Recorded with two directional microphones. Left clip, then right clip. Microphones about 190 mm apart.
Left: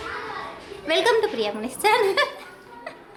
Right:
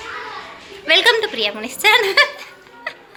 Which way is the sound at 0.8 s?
5° left (ahead or behind).